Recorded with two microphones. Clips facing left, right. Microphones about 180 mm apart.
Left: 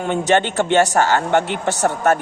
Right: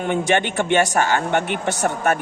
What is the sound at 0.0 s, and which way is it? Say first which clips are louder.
Speech: left 2 dB; 15° right (ahead or behind).